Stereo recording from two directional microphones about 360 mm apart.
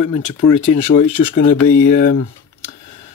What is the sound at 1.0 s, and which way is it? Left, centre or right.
Speech, left.